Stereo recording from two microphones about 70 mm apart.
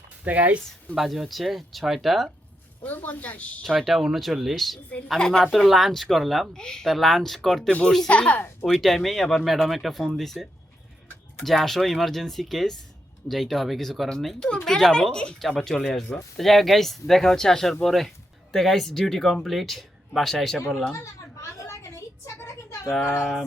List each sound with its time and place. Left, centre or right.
0.3 s speech: right
0.9 s speech: centre
2.8 s speech: left
3.8 s speech: centre
7.7 s speech: centre
8.6 s speech: centre
21.6 s a sound: left